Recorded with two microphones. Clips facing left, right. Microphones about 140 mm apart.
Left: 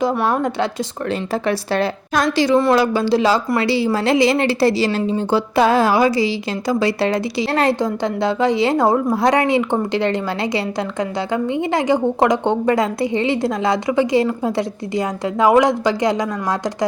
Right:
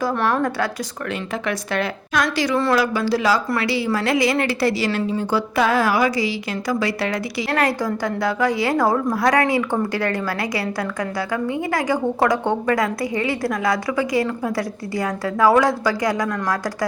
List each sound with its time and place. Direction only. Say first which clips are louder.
0.3 s a woman's voice: left 2 dB; 25° left (ahead or behind)